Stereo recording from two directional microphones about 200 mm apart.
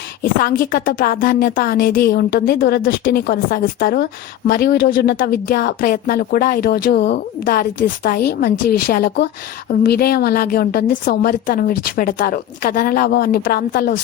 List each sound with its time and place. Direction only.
0.2 s a woman's voice: 45° left (ahead or behind)